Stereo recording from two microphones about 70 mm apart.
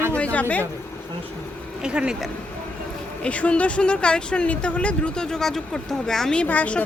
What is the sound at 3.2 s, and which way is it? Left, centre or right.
A woman's voice, centre.